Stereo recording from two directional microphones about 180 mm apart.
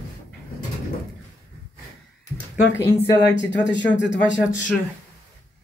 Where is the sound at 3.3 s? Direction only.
75° left (ahead or behind).